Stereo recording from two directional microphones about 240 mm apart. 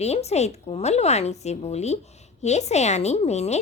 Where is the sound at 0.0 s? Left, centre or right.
Left.